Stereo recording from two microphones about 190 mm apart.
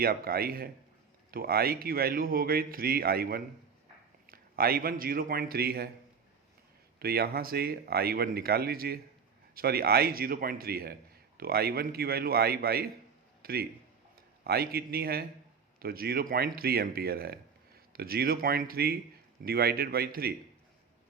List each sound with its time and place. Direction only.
0.0 s speech: 50° right (ahead or behind)
7.0 s a man's voice: 55° right (ahead or behind)